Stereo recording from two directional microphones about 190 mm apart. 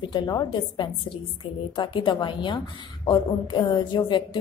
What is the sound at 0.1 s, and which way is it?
A woman's voice, 20° left (ahead or behind).